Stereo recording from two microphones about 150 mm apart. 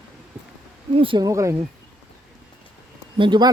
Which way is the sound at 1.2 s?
20° right (ahead or behind).